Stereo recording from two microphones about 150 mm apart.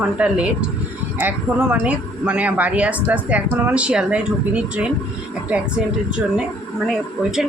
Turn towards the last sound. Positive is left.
turn(degrees=0)  # may be behind; listen again after turning